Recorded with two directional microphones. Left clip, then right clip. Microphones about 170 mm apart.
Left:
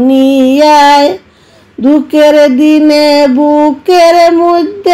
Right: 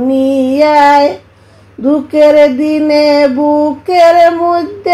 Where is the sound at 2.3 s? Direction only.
35° left (ahead or behind).